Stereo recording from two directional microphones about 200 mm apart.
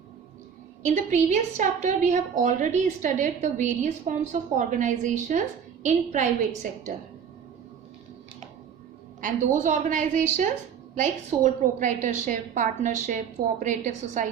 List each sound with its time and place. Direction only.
0.9 s a woman's voice: 40° right (ahead or behind)
9.2 s a woman's voice: 40° right (ahead or behind)